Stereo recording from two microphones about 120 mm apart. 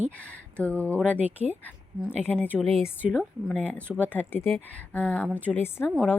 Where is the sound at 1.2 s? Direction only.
10° right (ahead or behind).